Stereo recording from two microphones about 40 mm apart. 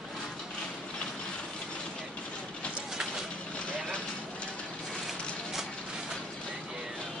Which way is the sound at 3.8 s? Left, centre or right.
Left.